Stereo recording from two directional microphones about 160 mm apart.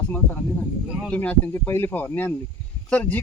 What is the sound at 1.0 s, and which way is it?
Speech, 5° left (ahead or behind).